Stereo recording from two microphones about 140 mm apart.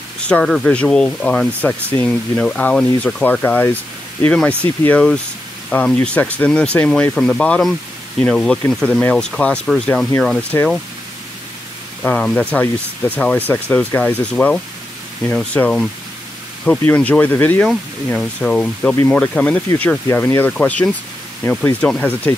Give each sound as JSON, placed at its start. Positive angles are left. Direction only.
{"t": 0.3, "sound": "speech", "side_deg": 5}
{"t": 10.5, "sound": "speech", "side_deg": 20}
{"t": 12.0, "sound": "speech", "side_deg": 5}
{"t": 16.8, "sound": "speech", "side_deg": 10}